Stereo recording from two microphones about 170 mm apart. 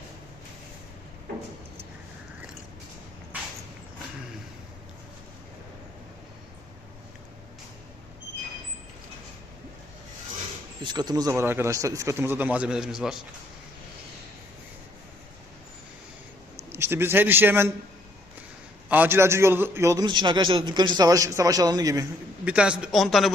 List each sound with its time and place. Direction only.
10.8 s speech: 25° right (ahead or behind); by 13.1 s 5° right (ahead or behind)
16.7 s a man's voice: 15° right (ahead or behind)
18.9 s a man's voice: 10° right (ahead or behind)
22.4 s speech: 5° right (ahead or behind)